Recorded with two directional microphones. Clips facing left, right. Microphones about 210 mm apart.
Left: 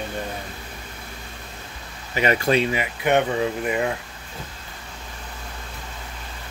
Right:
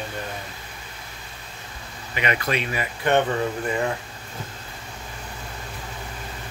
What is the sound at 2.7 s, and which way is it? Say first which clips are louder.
Speech: left 1 dB; 15° left (ahead or behind).